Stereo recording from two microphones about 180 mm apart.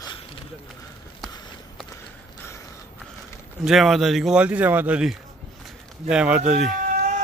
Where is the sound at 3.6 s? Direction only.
Centre (ahead or behind).